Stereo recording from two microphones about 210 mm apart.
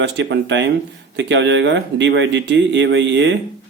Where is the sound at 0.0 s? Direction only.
55° right (ahead or behind).